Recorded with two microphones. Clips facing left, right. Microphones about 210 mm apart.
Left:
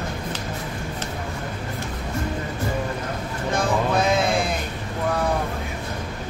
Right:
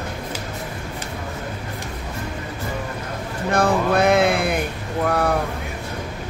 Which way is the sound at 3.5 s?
60° right (ahead or behind).